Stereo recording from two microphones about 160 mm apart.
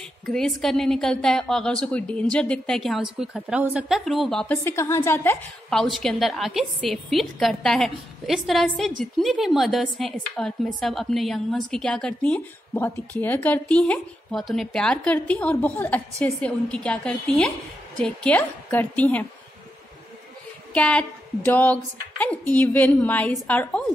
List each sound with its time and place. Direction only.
0.3 s a woman's voice: 5° left (ahead or behind)
4.6 s speech: 15° left (ahead or behind)
5.7 s a woman's voice: centre (ahead or behind)
20.7 s speech: 10° left (ahead or behind)